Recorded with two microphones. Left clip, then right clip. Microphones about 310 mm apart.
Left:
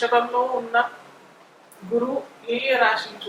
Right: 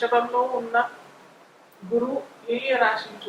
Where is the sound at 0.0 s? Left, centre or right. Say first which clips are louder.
Left 2 dB; centre.